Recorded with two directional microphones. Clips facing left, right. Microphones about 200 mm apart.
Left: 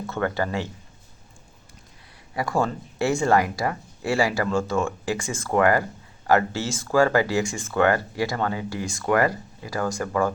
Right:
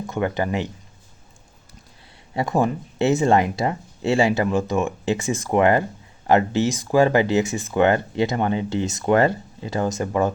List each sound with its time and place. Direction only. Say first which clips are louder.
0.0 s speech: right 2 dB; 15° right (ahead or behind)
2.3 s speech: right 3 dB; 20° right (ahead or behind)